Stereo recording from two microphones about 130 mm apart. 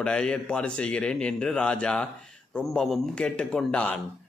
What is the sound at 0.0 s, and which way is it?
A man's voice, 5° left (ahead or behind).